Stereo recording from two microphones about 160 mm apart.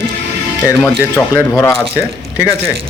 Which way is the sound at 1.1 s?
10° left (ahead or behind).